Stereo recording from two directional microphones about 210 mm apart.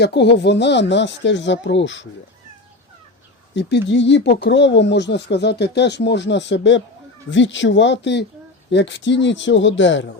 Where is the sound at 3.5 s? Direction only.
55° left (ahead or behind).